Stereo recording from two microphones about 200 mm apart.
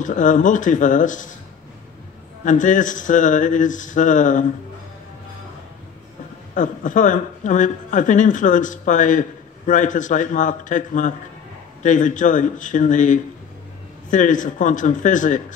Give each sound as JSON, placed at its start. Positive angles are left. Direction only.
{"t": 0.0, "sound": "speech", "side_deg": 40}
{"t": 2.4, "sound": "speech", "side_deg": 40}
{"t": 6.5, "sound": "speech", "side_deg": 40}